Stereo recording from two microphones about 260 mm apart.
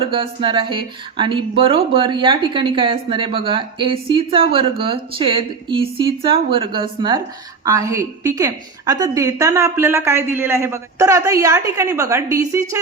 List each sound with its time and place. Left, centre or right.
0.0 s a woman's voice: centre